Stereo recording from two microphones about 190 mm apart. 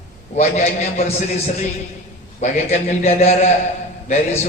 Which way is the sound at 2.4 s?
35° left (ahead or behind).